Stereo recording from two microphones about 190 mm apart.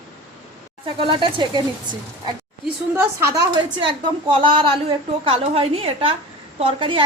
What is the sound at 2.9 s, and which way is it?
Speech, 10° right (ahead or behind).